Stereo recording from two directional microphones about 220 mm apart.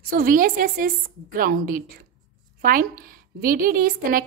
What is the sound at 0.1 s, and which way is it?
A woman's voice, 40° right (ahead or behind).